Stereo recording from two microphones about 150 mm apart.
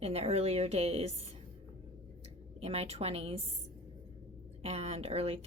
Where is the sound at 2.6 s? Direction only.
40° right (ahead or behind).